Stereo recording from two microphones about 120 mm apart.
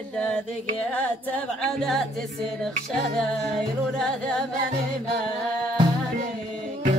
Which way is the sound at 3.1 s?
Centre (ahead or behind).